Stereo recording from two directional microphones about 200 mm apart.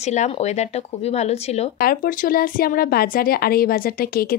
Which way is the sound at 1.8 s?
45° left (ahead or behind).